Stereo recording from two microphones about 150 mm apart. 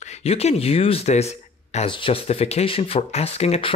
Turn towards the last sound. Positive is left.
turn(degrees=45)  # may be behind; listen again after turning